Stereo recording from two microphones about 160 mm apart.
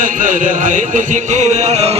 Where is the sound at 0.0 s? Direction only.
55° right (ahead or behind).